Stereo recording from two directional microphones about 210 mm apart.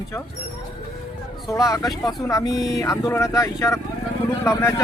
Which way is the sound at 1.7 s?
15° left (ahead or behind).